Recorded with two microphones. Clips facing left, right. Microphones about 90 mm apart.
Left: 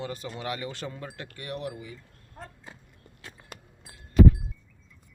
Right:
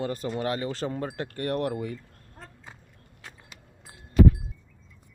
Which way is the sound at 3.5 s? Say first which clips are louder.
Left 5 dB; 50° left (ahead or behind).